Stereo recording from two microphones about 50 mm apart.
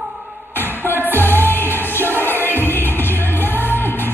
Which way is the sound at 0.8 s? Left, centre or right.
Left.